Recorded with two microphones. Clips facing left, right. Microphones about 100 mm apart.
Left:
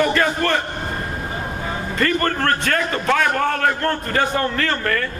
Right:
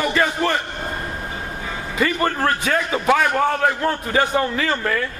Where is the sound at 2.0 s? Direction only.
5° right (ahead or behind).